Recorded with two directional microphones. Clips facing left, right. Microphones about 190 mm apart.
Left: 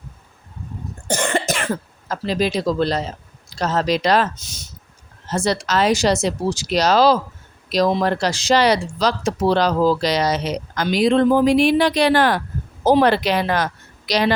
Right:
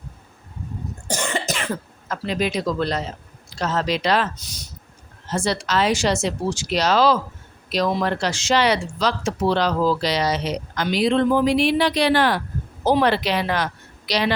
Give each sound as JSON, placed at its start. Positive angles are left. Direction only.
{"t": 1.0, "sound": "cough", "side_deg": 55}
{"t": 2.0, "sound": "speech", "side_deg": 35}
{"t": 4.4, "sound": "speech", "side_deg": 25}
{"t": 5.3, "sound": "speech", "side_deg": 40}